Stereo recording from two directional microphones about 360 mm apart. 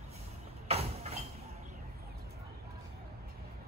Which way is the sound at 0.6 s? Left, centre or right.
Centre.